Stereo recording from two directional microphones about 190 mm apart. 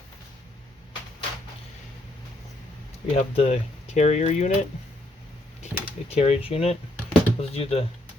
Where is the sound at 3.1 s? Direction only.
30° left (ahead or behind).